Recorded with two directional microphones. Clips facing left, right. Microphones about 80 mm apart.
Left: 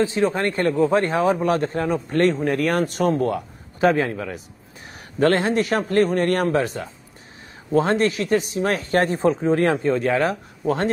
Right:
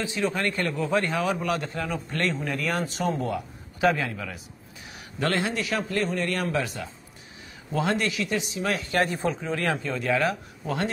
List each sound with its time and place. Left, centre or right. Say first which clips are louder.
0.0 s a man's voice: left 7 dB; left
3.9 s a man's voice: left 8 dB; left